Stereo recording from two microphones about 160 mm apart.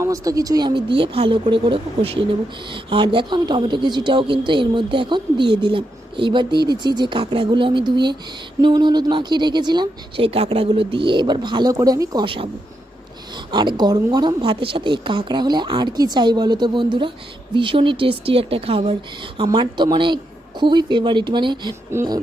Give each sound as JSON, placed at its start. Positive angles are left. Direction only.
{"t": 0.0, "sound": "a woman's voice", "side_deg": -20}
{"t": 13.5, "sound": "a woman's voice", "side_deg": -30}